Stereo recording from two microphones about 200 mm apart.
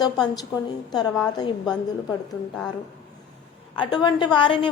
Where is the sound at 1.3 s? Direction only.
20° left (ahead or behind).